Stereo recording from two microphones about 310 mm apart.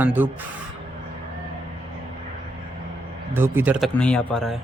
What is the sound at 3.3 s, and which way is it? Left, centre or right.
Speech, centre.